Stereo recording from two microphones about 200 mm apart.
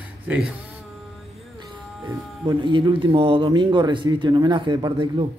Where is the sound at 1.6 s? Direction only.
25° right (ahead or behind).